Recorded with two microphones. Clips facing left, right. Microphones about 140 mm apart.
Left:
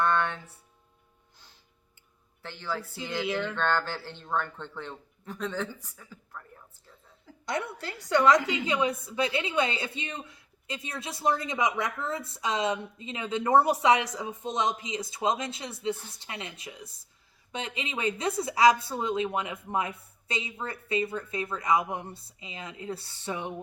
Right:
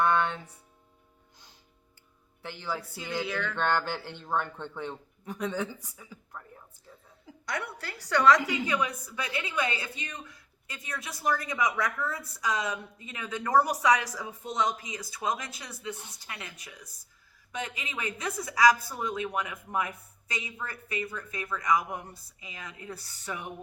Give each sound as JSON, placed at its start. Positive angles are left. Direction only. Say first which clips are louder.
{"t": 0.0, "sound": "speech", "louder": "right 1 dB", "side_deg": -15}
{"t": 2.4, "sound": "speech", "louder": "left 1 dB", "side_deg": -15}
{"t": 3.2, "sound": "a woman's voice", "louder": "left 3 dB", "side_deg": 20}
{"t": 3.6, "sound": "speech", "louder": "even", "side_deg": -15}
{"t": 7.4, "sound": "a woman's voice", "louder": "left 3 dB", "side_deg": 25}